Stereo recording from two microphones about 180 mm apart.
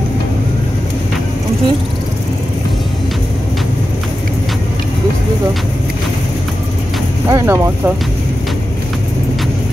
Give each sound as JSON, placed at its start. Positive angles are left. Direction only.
{"t": 7.2, "sound": "speech", "side_deg": -15}